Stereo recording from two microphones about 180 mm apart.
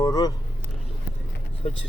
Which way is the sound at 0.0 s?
20° left (ahead or behind).